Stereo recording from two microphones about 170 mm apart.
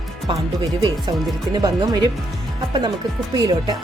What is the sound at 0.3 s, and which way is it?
Speech, 25° right (ahead or behind).